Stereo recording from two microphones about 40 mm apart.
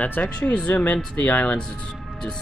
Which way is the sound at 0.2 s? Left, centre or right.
Left.